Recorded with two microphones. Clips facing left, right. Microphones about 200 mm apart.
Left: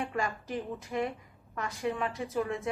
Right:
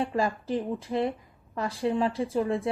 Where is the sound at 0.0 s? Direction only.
30° right (ahead or behind).